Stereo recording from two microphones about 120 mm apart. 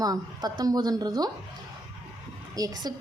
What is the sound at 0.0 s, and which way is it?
Speech, 30° right (ahead or behind).